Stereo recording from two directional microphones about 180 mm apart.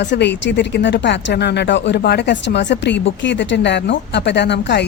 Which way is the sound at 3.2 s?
90° left.